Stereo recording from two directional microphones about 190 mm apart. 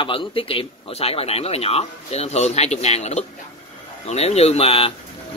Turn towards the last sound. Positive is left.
turn(degrees=30)  # may be behind; listen again after turning